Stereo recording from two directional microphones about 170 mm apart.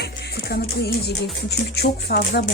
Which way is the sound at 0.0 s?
70° left (ahead or behind).